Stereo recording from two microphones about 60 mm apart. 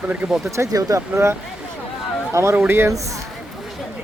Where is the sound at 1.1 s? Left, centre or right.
Right.